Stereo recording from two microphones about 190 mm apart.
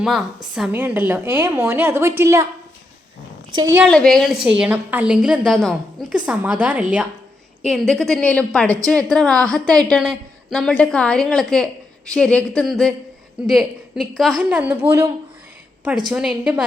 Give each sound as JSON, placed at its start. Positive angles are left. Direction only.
{"t": 0.0, "sound": "a woman's voice", "side_deg": 0}
{"t": 3.5, "sound": "a woman's voice", "side_deg": -20}
{"t": 3.8, "sound": "a woman's voice", "side_deg": 0}
{"t": 16.1, "sound": "a woman's voice", "side_deg": -5}